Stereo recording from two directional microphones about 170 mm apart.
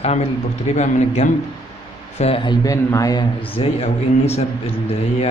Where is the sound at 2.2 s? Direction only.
30° left (ahead or behind).